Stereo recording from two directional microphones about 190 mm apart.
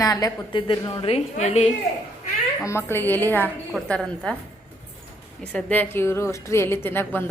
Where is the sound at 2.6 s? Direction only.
15° left (ahead or behind).